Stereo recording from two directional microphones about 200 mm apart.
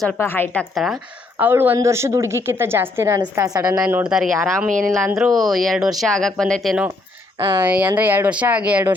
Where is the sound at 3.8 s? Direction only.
5° right (ahead or behind).